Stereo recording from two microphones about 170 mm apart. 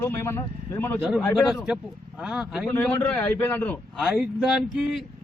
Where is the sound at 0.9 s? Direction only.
10° right (ahead or behind).